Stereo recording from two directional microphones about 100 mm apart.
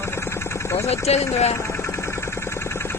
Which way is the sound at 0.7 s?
90° left.